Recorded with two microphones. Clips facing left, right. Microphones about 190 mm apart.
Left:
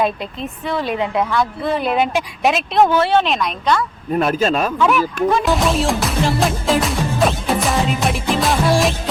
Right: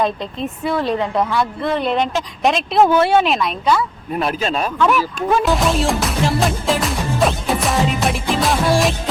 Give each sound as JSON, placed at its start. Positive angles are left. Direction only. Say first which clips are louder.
{"t": 0.6, "sound": "speech", "louder": "right 2 dB", "side_deg": -5}
{"t": 0.9, "sound": "a woman's voice", "louder": "even", "side_deg": 10}
{"t": 1.2, "sound": "speech", "louder": "even", "side_deg": 0}
{"t": 2.9, "sound": "speech", "louder": "right 1 dB", "side_deg": -10}
{"t": 4.1, "sound": "speech", "louder": "left 4 dB", "side_deg": 45}
{"t": 4.8, "sound": "speech", "louder": "right 1 dB", "side_deg": 0}